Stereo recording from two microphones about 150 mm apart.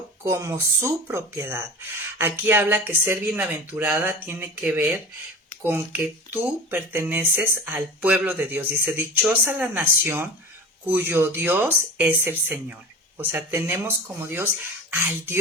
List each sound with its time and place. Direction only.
0.3 s a woman's voice: 20° right (ahead or behind)